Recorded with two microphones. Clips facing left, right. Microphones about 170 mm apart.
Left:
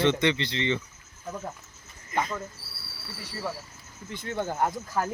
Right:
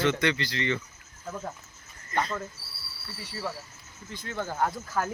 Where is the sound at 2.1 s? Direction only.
10° left (ahead or behind).